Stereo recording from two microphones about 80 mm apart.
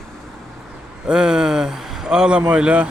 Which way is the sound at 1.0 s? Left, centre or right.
Centre.